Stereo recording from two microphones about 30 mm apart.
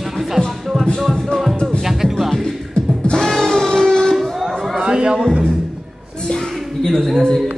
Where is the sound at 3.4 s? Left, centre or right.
Centre.